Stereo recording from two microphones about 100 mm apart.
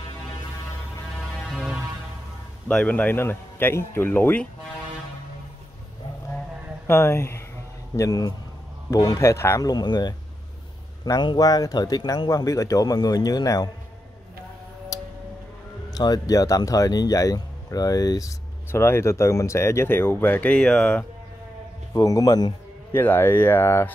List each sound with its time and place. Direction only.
1.3 s music: 5° right (ahead or behind)
2.7 s speech: 10° left (ahead or behind)
6.9 s speech: 25° left (ahead or behind)
9.6 s speech: 40° left (ahead or behind)
11.1 s speech: 45° left (ahead or behind)
15.9 s speech: 40° left (ahead or behind); by 21.0 s 10° left (ahead or behind)
21.9 s speech: 35° left (ahead or behind)
22.9 s speech: 20° left (ahead or behind)